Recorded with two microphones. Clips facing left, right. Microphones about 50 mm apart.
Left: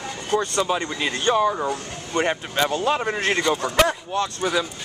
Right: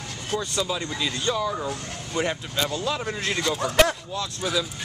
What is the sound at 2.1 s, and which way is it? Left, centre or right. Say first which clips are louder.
Speech: left 4 dB; left.